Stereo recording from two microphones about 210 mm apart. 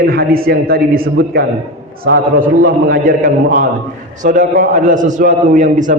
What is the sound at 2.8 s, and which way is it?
A man's voice, 45° right (ahead or behind).